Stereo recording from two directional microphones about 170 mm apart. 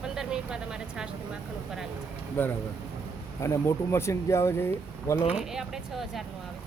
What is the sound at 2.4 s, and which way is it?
Speech, 10° left (ahead or behind).